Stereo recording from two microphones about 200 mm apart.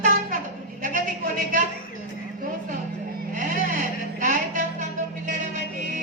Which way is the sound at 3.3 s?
40° right (ahead or behind).